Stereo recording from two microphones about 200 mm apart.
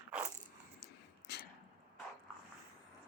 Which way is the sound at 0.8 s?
55° left (ahead or behind).